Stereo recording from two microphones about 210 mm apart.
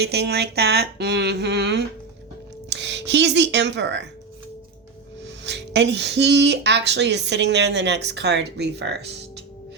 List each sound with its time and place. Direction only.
0.0 s speech: 50° right (ahead or behind)
5.2 s speech: 55° right (ahead or behind)